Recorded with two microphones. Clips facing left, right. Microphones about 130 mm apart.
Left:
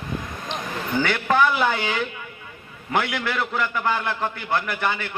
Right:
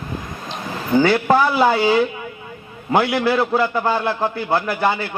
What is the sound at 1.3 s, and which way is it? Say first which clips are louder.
A man's voice: right 1 dB; 30° right (ahead or behind).